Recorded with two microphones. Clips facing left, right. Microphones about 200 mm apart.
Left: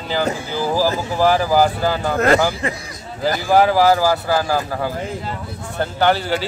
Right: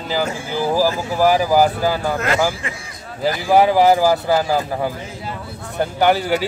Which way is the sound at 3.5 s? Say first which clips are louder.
Right 1 dB; 5° right (ahead or behind).